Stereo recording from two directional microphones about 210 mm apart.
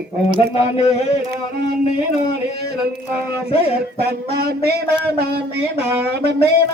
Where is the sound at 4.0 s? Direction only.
50° right (ahead or behind).